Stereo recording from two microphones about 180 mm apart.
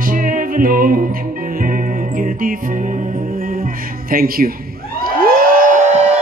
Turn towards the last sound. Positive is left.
turn(degrees=-45)  # may be behind; listen again after turning